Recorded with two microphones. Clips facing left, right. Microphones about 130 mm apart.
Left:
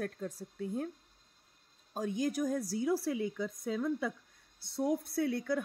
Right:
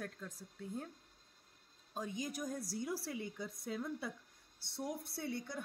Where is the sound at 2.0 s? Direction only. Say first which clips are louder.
Left 9 dB; 85° left.